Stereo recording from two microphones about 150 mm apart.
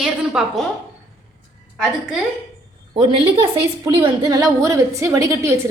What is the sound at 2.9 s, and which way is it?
A woman's voice, 35° right (ahead or behind).